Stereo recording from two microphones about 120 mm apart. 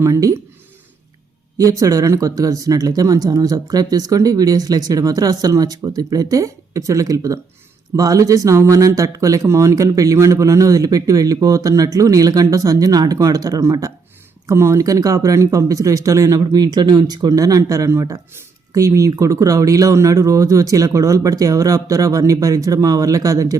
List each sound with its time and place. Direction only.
0.0 s speech: 25° right (ahead or behind)
1.5 s speech: 30° right (ahead or behind)